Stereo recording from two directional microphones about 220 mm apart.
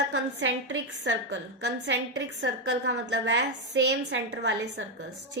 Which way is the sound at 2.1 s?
55° right (ahead or behind).